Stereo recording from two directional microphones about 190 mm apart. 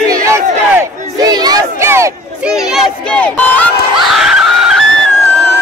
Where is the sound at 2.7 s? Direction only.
5° left (ahead or behind).